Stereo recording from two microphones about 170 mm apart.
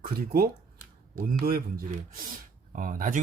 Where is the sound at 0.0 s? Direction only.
60° right (ahead or behind).